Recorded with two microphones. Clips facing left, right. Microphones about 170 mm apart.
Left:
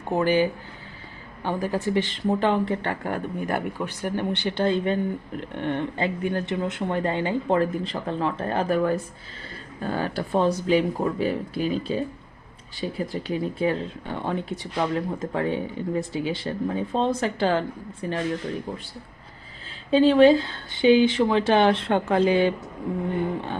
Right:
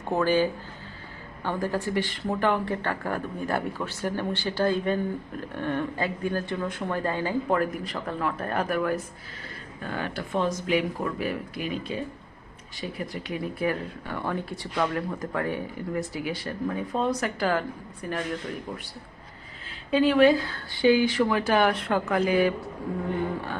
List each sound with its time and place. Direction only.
0.1 s speech: 15° left (ahead or behind)
19.9 s speech: 30° left (ahead or behind)